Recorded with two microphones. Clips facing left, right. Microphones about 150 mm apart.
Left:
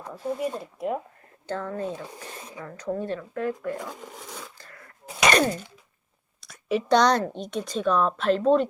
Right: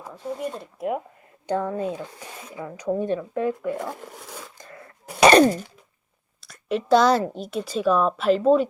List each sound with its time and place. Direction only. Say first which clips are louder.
0.0 s a woman's voice: left 1 dB; 5° left (ahead or behind)
1.5 s speech: right 5 dB; 15° right (ahead or behind)
4.5 s a sound: right 6 dB; 20° right (ahead or behind)
5.2 s wail: right 7 dB; 35° right (ahead or behind)
6.4 s a woman's voice: even; centre (ahead or behind)